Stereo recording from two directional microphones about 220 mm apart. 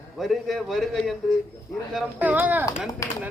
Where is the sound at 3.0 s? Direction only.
15° left (ahead or behind).